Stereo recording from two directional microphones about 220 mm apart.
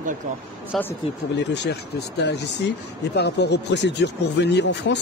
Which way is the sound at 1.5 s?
50° left (ahead or behind).